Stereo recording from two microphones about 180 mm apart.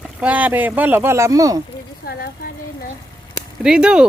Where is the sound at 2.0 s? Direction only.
60° left (ahead or behind).